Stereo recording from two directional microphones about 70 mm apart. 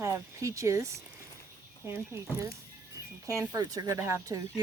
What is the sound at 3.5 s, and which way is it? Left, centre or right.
Speech, right.